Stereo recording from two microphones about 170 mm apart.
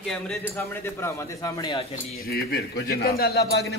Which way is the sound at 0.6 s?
15° left (ahead or behind).